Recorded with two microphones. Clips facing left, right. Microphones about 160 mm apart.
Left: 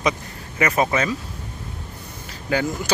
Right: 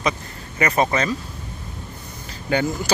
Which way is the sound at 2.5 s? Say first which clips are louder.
Right 1 dB; centre (ahead or behind).